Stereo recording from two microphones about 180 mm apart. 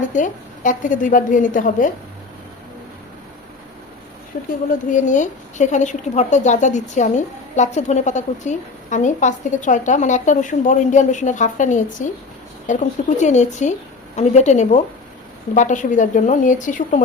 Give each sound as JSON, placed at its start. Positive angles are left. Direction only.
{"t": 0.1, "sound": "a woman's voice", "side_deg": 45}
{"t": 4.3, "sound": "a woman's voice", "side_deg": 50}
{"t": 13.1, "sound": "a woman's voice", "side_deg": 40}